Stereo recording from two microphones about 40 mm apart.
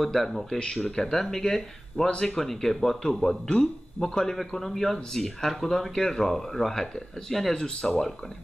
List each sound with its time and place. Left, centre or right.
0.0 s speech: centre
7.5 s speech: centre